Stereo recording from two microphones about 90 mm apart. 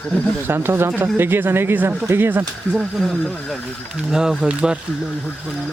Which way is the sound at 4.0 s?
10° right (ahead or behind).